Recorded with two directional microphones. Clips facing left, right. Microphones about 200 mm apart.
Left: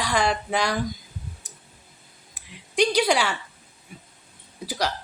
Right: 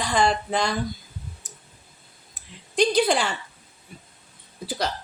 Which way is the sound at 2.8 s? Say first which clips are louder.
Right 1 dB; 10° left (ahead or behind).